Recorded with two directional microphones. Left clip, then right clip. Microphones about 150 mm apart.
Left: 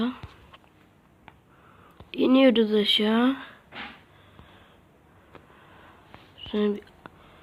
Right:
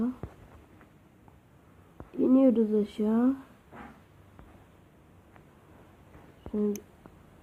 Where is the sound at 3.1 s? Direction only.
25° left (ahead or behind).